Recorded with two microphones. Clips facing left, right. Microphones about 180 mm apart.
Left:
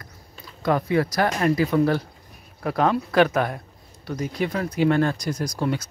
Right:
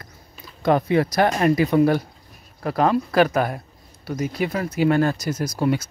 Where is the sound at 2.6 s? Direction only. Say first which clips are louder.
Right 2 dB; centre (ahead or behind).